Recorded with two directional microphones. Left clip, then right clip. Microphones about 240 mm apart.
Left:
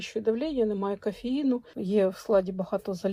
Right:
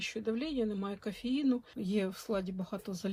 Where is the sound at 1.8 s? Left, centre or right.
Centre.